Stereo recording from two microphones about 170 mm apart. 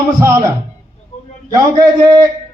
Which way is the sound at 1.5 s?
25° right (ahead or behind).